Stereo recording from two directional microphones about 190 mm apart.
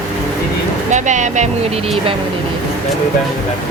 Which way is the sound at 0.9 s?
40° right (ahead or behind).